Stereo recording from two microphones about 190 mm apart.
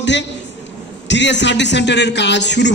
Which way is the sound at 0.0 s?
70° left (ahead or behind).